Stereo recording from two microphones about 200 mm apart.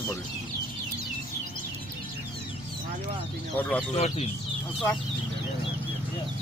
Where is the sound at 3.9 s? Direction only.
30° left (ahead or behind).